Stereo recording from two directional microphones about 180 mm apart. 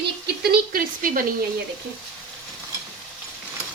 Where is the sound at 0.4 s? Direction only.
55° right (ahead or behind).